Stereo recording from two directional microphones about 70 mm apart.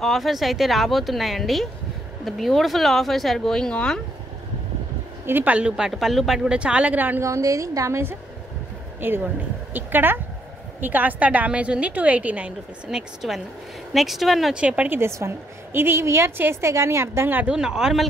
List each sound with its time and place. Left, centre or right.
0.0 s speech: centre
5.2 s speech: right
5.5 s a woman's voice: centre
7.2 s a woman's voice: right
9.0 s a woman's voice: right
12.9 s speech: centre
14.5 s a woman's voice: centre
15.0 s a woman's voice: right
17.4 s a woman's voice: centre